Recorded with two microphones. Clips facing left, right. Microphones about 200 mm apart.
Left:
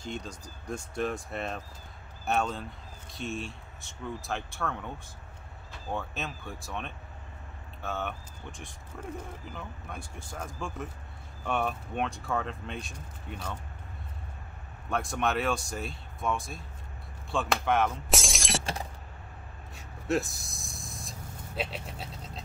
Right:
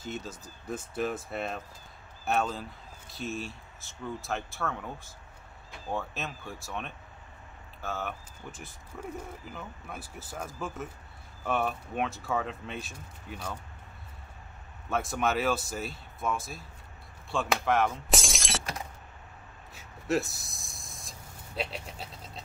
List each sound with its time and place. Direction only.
0.0 s speech: 5° right (ahead or behind)
14.9 s speech: centre (ahead or behind)
18.6 s keys jangling: 30° left (ahead or behind)
19.7 s vehicle: centre (ahead or behind)